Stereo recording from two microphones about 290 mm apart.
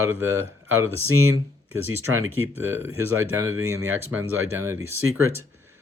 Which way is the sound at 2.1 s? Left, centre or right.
Right.